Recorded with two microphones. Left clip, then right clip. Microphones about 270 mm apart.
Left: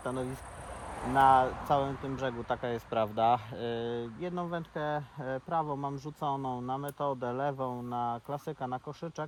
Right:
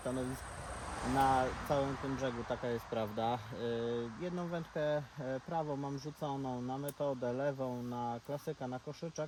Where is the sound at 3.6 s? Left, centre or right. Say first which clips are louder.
Left 2 dB; centre.